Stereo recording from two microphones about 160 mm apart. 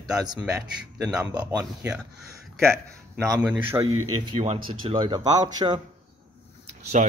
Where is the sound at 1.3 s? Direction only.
25° right (ahead or behind).